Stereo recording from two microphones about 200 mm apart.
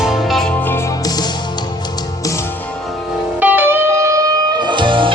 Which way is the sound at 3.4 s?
10° right (ahead or behind).